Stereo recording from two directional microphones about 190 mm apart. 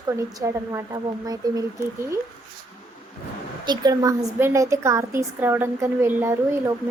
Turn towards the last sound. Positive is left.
turn(degrees=-10)  # may be behind; listen again after turning